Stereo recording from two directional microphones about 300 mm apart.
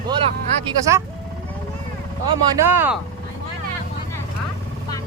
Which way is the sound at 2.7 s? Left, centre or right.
Centre.